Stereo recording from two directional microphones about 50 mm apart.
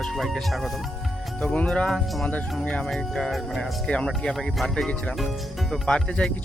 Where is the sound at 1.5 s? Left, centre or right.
Left.